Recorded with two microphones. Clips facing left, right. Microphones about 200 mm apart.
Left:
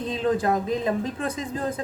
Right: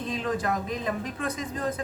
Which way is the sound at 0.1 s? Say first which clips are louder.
Left 6 dB; 25° left (ahead or behind).